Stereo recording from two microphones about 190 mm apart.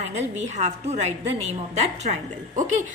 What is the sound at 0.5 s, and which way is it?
A woman's voice, 35° right (ahead or behind).